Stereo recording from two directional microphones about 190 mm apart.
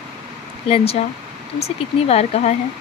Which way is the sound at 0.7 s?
30° left (ahead or behind).